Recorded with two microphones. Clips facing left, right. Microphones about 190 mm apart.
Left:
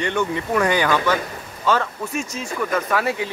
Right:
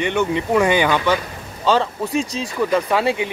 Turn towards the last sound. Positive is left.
turn(degrees=-20)  # may be behind; listen again after turning